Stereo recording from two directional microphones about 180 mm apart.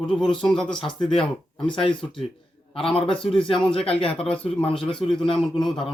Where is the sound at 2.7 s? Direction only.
30° left (ahead or behind).